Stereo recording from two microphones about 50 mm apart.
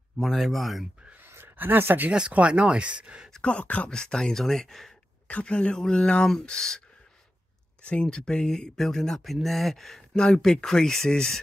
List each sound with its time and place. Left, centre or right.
0.2 s speech: centre
1.2 s a sound: right
2.3 s speech: right
3.4 s speech: left
3.9 s speech: centre
5.3 s speech: left
7.8 s speech: left